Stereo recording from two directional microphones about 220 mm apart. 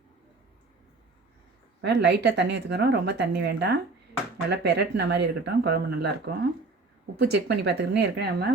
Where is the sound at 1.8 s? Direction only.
50° right (ahead or behind).